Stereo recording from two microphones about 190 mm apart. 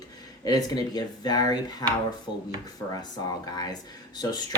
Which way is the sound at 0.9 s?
20° left (ahead or behind).